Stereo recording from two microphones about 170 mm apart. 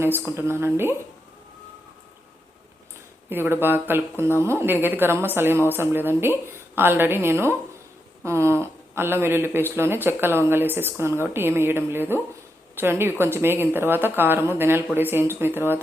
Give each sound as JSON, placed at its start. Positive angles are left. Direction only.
{"t": 0.3, "sound": "speech", "side_deg": -15}
{"t": 3.2, "sound": "speech", "side_deg": -10}